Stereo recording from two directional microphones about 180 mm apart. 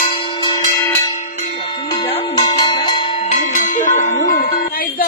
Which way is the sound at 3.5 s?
45° left (ahead or behind).